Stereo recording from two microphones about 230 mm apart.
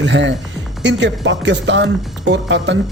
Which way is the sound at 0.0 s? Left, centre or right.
Right.